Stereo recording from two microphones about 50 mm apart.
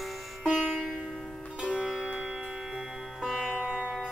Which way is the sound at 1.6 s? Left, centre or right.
Centre.